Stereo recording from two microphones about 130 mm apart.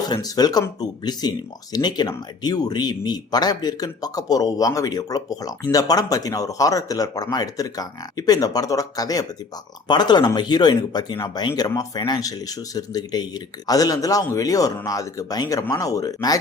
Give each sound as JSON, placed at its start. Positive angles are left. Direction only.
{"t": 0.1, "sound": "speech", "side_deg": 30}